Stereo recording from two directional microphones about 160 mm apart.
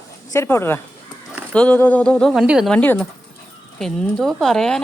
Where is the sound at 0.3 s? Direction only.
15° left (ahead or behind).